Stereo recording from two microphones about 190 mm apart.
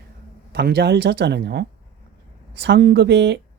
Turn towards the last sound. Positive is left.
turn(degrees=-65)  # may be behind; listen again after turning